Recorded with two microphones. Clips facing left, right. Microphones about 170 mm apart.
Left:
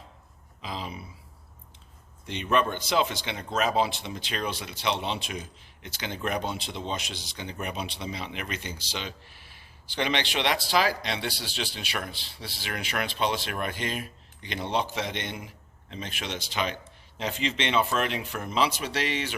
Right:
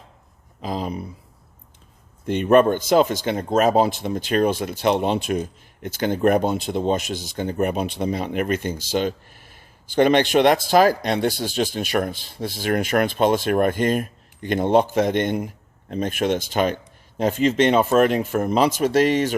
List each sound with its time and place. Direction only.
0.6 s speech: 45° right (ahead or behind)
2.2 s speech: 50° right (ahead or behind)